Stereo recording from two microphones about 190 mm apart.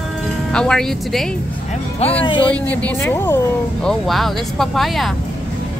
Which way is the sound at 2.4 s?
5° left (ahead or behind).